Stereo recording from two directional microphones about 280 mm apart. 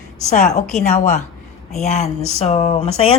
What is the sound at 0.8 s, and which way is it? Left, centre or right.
Speech, left.